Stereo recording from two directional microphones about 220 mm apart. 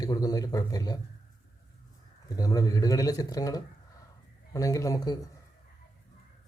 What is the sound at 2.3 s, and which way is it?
Speech, 15° left (ahead or behind).